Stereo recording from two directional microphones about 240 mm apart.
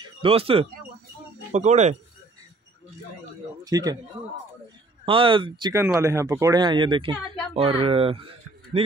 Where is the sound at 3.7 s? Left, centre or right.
Centre.